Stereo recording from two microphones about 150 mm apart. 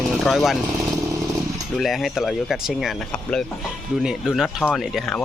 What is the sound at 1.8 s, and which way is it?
Speech, centre (ahead or behind).